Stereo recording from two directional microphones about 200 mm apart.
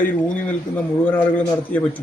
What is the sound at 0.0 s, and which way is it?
A man's voice, 10° left (ahead or behind).